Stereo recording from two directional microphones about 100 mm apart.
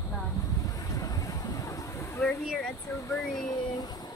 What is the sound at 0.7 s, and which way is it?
Vehicle, 35° left (ahead or behind).